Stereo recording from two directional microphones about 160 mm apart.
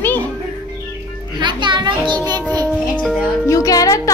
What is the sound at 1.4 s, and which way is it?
A child's voice, 30° right (ahead or behind).